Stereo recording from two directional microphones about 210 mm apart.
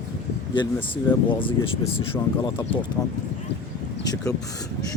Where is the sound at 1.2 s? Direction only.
25° left (ahead or behind).